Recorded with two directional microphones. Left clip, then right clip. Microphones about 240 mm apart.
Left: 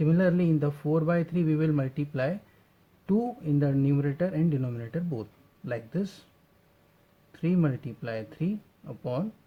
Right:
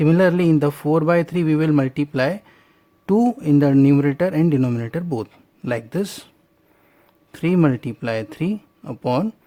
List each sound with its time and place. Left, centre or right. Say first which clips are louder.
0.0 s speech: right 10 dB; right
7.3 s speech: right 11 dB; right